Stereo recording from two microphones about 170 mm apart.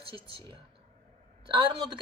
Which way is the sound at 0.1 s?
30° right (ahead or behind).